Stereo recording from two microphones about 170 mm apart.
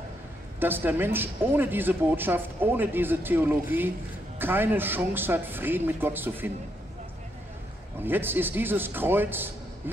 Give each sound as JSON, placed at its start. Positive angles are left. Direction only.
{"t": 0.6, "sound": "a man's voice", "side_deg": -10}
{"t": 8.0, "sound": "a man's voice", "side_deg": -10}